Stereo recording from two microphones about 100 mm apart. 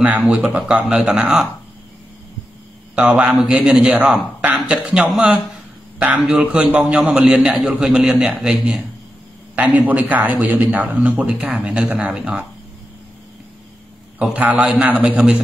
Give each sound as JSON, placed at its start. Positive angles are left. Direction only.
{"t": 0.2, "sound": "a man's voice", "side_deg": -10}
{"t": 3.0, "sound": "a man's voice", "side_deg": -10}
{"t": 14.3, "sound": "a man's voice", "side_deg": -10}